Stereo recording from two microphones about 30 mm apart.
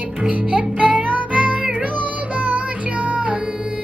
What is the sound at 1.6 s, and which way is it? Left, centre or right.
Music, right.